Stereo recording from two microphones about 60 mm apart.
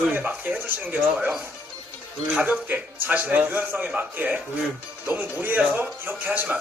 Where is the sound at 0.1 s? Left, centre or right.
Right.